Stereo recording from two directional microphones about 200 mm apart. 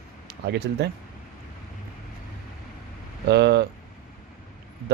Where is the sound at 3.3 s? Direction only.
55° right (ahead or behind).